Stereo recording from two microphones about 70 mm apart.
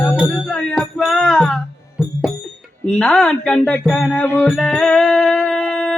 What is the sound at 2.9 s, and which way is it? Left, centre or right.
Music, centre.